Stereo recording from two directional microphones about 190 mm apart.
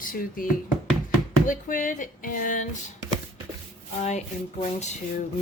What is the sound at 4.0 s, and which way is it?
Speech, 35° left (ahead or behind).